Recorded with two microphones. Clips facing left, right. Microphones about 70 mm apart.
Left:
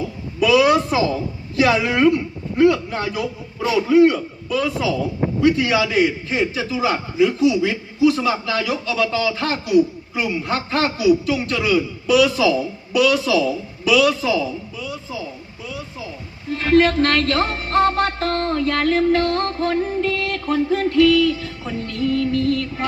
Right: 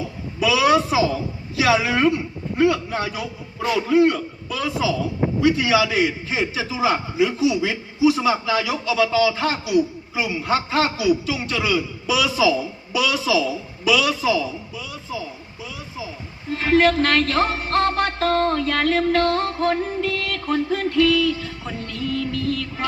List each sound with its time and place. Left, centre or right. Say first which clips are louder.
0.3 s a man's voice: left 3 dB; centre
16.5 s a man's voice: left 1 dB; centre